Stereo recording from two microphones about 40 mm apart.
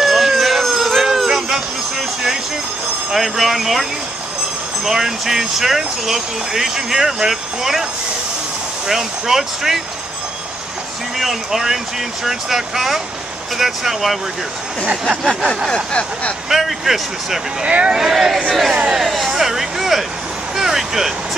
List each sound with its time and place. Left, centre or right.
0.0 s music: centre
3.1 s speech: centre
4.8 s speech: centre
8.8 s speech: centre
11.1 s speech: centre
15.2 s speech: centre
15.7 s a sound: left
16.4 s speech: centre
17.6 s speech: right
17.9 s speech: centre
20.5 s vehicle: centre